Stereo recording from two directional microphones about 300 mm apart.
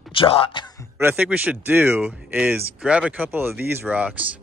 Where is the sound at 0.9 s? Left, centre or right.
Centre.